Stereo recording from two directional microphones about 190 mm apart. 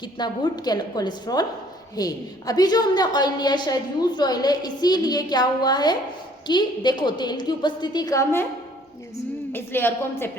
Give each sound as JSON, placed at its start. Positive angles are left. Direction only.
{"t": 0.0, "sound": "a woman's voice", "side_deg": 20}
{"t": 9.5, "sound": "a woman's voice", "side_deg": 10}